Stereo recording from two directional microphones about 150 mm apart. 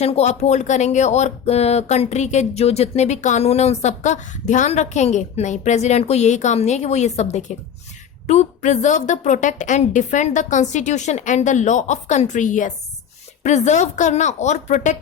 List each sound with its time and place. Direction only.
0.0 s speech: 45° left (ahead or behind)